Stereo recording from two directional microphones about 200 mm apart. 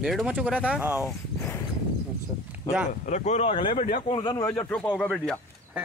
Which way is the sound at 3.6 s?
40° left (ahead or behind).